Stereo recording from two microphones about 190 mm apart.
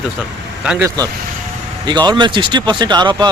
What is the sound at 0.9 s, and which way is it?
Speech, 20° right (ahead or behind).